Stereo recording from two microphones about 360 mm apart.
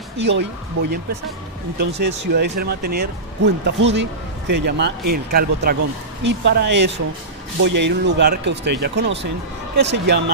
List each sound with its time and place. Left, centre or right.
0.2 s speech: right